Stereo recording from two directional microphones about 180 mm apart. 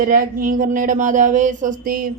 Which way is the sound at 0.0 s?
50° right (ahead or behind).